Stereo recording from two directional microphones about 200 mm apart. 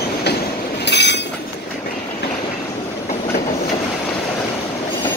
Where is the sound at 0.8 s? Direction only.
60° left (ahead or behind).